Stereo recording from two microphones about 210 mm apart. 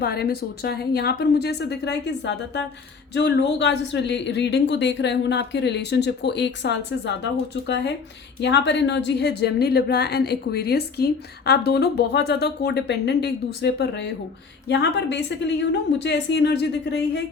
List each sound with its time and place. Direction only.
0.0 s a woman's voice: 50° left (ahead or behind)